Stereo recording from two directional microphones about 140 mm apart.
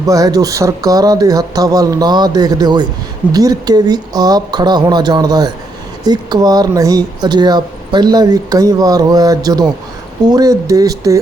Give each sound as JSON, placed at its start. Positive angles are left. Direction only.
{"t": 0.0, "sound": "speech", "side_deg": -25}